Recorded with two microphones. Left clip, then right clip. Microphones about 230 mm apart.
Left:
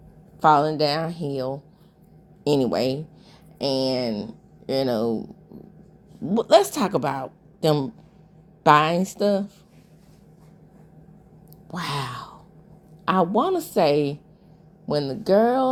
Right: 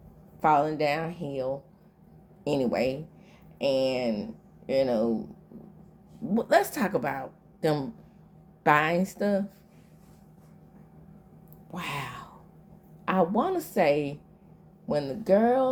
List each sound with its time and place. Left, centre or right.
0.3 s speech: left
6.3 s speech: left
11.7 s speech: left